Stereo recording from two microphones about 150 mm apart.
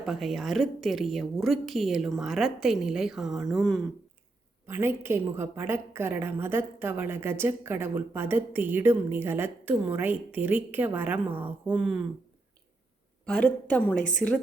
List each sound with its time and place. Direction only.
0.0 s speech: centre (ahead or behind)
4.6 s a woman's voice: 15° right (ahead or behind)
13.2 s a woman's voice: 5° left (ahead or behind)